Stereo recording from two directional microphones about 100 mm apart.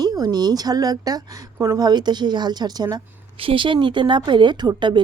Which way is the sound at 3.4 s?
60° right (ahead or behind).